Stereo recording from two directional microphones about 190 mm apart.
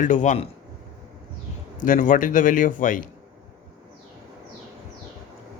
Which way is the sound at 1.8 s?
45° left (ahead or behind).